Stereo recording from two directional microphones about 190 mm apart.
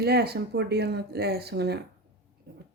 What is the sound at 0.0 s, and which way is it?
Speech, 55° right (ahead or behind).